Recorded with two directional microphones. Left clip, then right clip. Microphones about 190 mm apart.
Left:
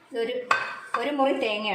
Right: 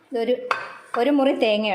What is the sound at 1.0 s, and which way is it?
Speech, 60° right (ahead or behind).